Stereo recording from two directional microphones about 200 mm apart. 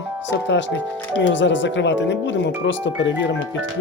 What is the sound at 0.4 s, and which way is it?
Speech, 65° left (ahead or behind).